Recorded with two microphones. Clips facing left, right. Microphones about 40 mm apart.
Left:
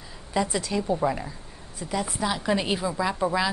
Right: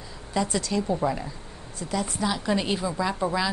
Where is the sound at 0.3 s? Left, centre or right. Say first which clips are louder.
Even; centre.